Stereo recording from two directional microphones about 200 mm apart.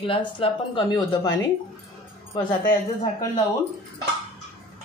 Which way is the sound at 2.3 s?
25° left (ahead or behind).